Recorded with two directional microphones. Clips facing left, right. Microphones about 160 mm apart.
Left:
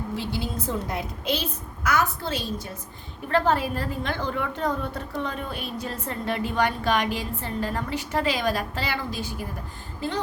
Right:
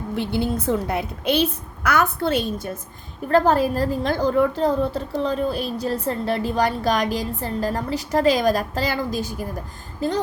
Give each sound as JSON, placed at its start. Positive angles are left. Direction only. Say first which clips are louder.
{"t": 0.2, "sound": "a woman's voice", "louder": "right 7 dB", "side_deg": -60}
{"t": 3.2, "sound": "a woman's voice", "louder": "right 5 dB", "side_deg": -40}